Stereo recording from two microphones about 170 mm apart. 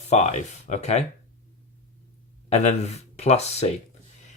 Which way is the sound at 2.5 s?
40° left (ahead or behind).